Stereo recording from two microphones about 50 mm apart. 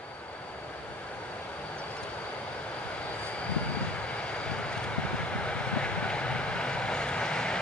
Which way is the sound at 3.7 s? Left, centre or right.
Left.